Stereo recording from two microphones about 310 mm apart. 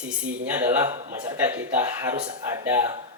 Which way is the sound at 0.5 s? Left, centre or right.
Centre.